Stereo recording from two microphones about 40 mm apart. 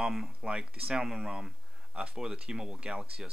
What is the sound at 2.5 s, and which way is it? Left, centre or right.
Speech, right.